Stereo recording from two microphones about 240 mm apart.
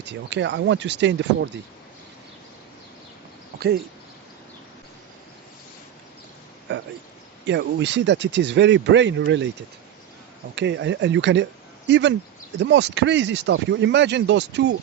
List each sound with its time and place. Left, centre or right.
0.0 s speech: right
6.7 s speech: right
10.5 s speech: right